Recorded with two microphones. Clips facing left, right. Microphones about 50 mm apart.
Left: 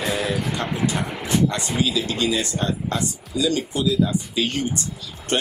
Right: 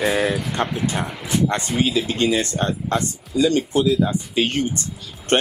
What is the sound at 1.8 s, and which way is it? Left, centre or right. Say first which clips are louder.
Speech: right 2 dB; right.